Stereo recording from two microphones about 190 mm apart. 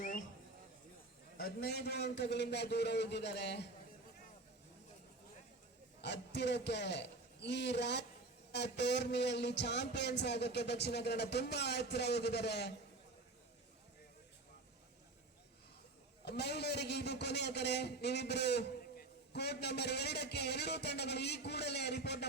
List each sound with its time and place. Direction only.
1.4 s a man's voice: 55° left (ahead or behind)
6.0 s a man's voice: 65° left (ahead or behind)
16.2 s a man's voice: 60° left (ahead or behind)